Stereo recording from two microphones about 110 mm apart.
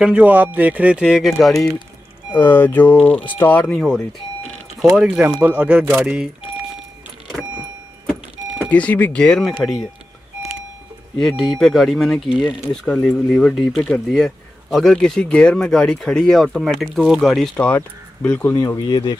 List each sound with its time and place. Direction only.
0.0 s speech: 15° right (ahead or behind)
2.3 s speech: 20° left (ahead or behind)
4.9 s speech: 5° right (ahead or behind)
8.6 s speech: 10° left (ahead or behind)
11.1 s speech: centre (ahead or behind)
17.6 s speech: 15° left (ahead or behind)